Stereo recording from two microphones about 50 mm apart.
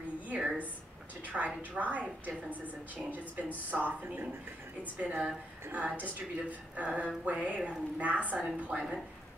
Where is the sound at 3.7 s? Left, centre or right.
Right.